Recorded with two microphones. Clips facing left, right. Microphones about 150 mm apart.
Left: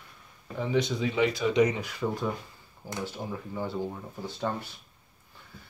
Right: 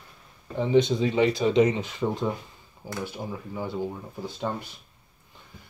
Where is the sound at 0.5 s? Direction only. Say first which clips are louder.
Right 6 dB; 25° right (ahead or behind).